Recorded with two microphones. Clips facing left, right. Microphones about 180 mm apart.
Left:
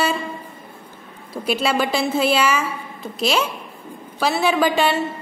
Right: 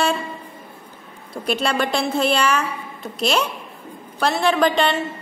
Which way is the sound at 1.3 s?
5° left (ahead or behind).